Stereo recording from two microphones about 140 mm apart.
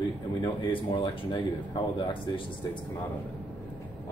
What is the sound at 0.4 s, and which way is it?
Speech, 35° left (ahead or behind).